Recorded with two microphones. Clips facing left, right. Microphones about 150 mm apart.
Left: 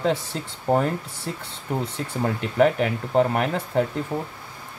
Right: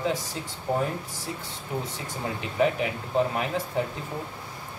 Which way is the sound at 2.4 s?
70° left (ahead or behind).